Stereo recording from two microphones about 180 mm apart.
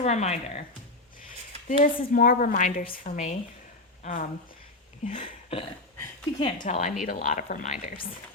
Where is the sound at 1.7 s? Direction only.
45° left (ahead or behind).